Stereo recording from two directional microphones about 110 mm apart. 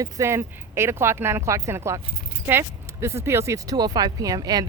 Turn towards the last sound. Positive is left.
turn(degrees=-35)  # may be behind; listen again after turning